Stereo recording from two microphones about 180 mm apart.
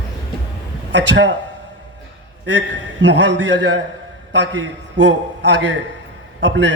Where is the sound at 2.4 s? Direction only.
80° right.